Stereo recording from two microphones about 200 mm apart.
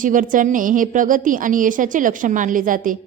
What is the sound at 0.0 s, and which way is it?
A woman's voice, 40° right (ahead or behind).